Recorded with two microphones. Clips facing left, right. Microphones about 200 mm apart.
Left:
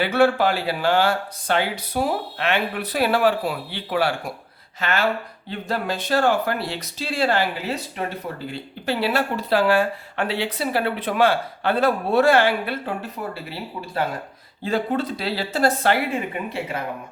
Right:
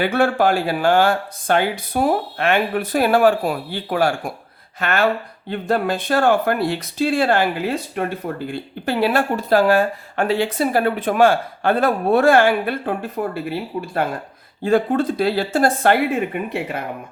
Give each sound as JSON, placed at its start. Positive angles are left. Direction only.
{"t": 0.0, "sound": "speech", "side_deg": -50}